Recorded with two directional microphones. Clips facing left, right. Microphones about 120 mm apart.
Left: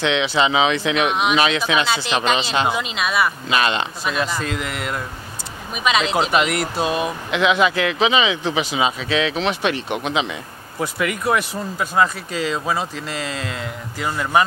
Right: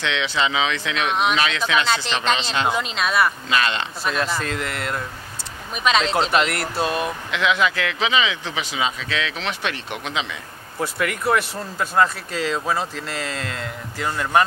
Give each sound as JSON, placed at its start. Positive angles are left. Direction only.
{"t": 0.0, "sound": "speech", "side_deg": 15}
{"t": 3.4, "sound": "speech", "side_deg": 20}
{"t": 4.0, "sound": "speech", "side_deg": 5}
{"t": 7.2, "sound": "speech", "side_deg": 20}
{"t": 10.8, "sound": "speech", "side_deg": 5}